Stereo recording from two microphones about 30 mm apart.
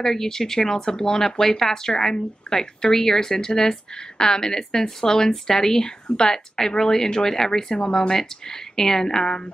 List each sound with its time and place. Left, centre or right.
0.0 s speech: centre